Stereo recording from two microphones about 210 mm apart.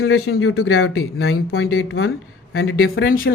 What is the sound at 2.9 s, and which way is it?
Speech, 45° left (ahead or behind).